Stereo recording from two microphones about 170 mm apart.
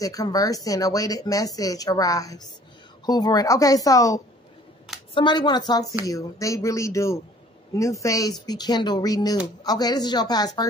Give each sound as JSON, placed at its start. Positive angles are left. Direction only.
{"t": 0.0, "sound": "speech", "side_deg": 20}